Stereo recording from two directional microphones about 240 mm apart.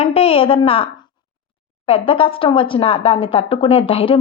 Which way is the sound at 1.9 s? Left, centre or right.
Left.